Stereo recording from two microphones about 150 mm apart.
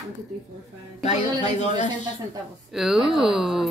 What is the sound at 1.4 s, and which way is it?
Speech, 50° left (ahead or behind).